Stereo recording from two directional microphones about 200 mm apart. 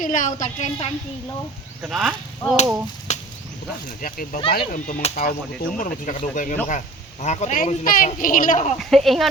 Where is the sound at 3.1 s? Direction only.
35° left (ahead or behind).